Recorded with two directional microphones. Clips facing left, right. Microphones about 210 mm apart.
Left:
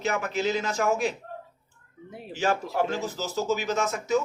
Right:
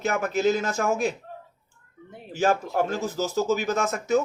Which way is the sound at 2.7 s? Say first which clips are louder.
Right 2 dB; 45° right (ahead or behind).